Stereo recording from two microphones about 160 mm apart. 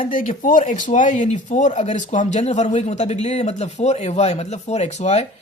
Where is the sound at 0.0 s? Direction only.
55° left (ahead or behind).